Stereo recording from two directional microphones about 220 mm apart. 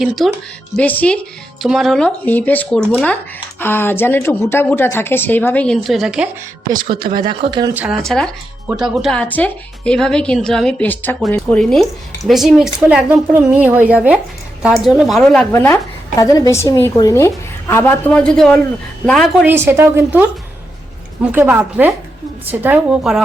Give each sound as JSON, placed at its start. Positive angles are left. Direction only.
{"t": 0.2, "sound": "a woman's voice", "side_deg": 0}
{"t": 7.1, "sound": "speech", "side_deg": -35}
{"t": 7.7, "sound": "speech", "side_deg": -5}
{"t": 15.5, "sound": "a woman's voice", "side_deg": 10}
{"t": 19.5, "sound": "speech", "side_deg": -10}